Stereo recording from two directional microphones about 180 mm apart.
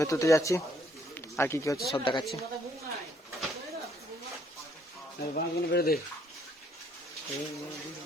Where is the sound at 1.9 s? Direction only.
25° left (ahead or behind).